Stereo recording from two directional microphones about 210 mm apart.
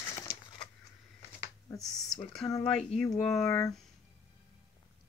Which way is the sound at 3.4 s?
15° left (ahead or behind).